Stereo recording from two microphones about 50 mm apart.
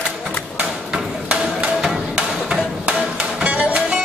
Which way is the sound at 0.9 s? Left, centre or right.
Right.